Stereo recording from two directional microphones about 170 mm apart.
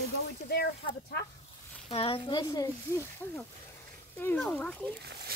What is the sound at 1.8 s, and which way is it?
Speech, 35° left (ahead or behind).